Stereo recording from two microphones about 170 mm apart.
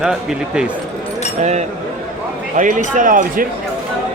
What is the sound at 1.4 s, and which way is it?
Speech, 40° right (ahead or behind).